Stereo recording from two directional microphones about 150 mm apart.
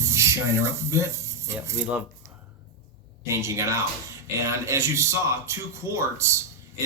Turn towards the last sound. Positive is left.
turn(degrees=-20)  # may be behind; listen again after turning